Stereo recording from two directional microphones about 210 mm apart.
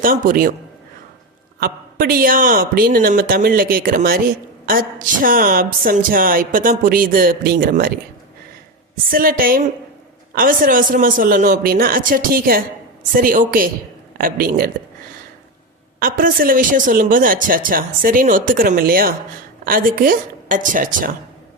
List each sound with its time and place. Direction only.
0.0 s speech: 40° right (ahead or behind)
1.5 s a man's voice: 45° right (ahead or behind)
9.0 s a man's voice: 45° right (ahead or behind)
16.0 s speech: 40° right (ahead or behind)